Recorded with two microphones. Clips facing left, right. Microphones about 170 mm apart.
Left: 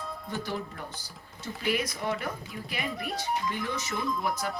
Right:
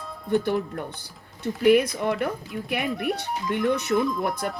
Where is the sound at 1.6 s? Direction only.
60° right (ahead or behind).